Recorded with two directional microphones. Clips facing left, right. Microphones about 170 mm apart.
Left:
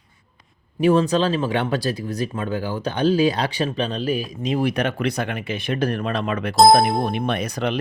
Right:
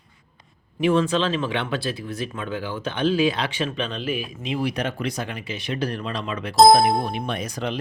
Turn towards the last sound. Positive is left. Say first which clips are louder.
# left 4 dB
turn(degrees=65)  # may be behind; listen again after turning